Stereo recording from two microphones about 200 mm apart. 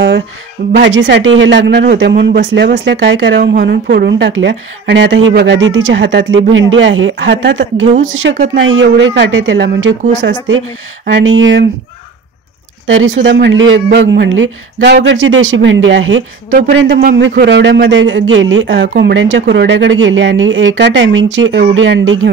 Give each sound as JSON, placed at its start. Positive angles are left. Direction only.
{"t": 0.8, "sound": "speech", "side_deg": -60}
{"t": 8.1, "sound": "speech", "side_deg": -70}
{"t": 12.8, "sound": "speech", "side_deg": -70}
{"t": 16.7, "sound": "speech", "side_deg": -55}